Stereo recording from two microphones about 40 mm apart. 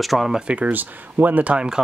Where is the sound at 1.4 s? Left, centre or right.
Right.